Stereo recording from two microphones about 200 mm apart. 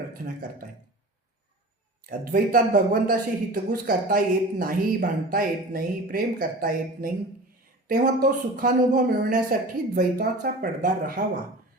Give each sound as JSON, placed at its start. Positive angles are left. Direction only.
{"t": 2.0, "sound": "speech", "side_deg": -45}